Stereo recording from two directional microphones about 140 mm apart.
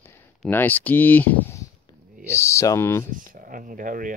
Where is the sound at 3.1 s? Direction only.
80° right.